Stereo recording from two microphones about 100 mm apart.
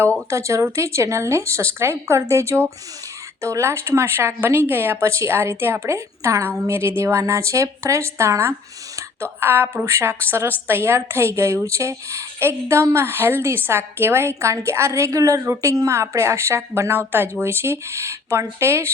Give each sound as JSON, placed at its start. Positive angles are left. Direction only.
{"t": 0.3, "sound": "speech", "side_deg": -30}